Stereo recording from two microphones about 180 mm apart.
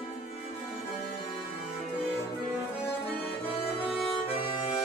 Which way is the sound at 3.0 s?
30° left (ahead or behind).